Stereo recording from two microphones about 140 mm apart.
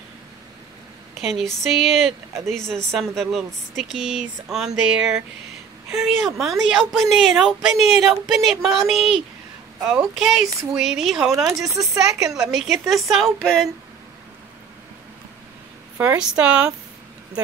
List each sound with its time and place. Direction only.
1.2 s a woman's voice: centre (ahead or behind)
11.3 s speech: 20° right (ahead or behind)
12.3 s a woman's voice: 5° right (ahead or behind)
16.2 s speech: 5° right (ahead or behind)